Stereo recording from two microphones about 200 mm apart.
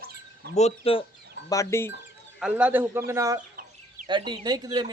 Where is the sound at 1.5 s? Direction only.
15° left (ahead or behind).